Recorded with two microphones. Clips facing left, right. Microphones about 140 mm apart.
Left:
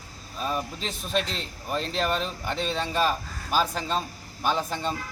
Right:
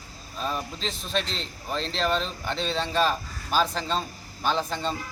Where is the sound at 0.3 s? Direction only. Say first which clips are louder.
Left 1 dB; 5° left (ahead or behind).